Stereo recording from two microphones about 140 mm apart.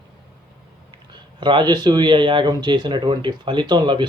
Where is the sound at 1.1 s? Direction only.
35° right (ahead or behind).